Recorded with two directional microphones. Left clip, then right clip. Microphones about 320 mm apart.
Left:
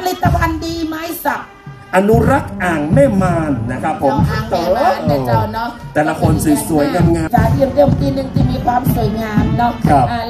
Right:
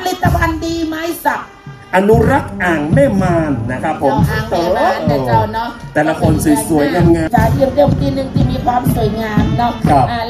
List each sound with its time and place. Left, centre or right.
0.0 s music: left
1.9 s a woman's voice: left